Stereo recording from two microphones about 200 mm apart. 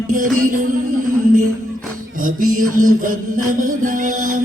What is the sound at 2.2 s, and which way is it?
Mantra, 45° right (ahead or behind).